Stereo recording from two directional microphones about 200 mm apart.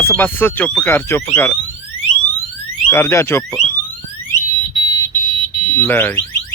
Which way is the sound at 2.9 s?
10° left (ahead or behind).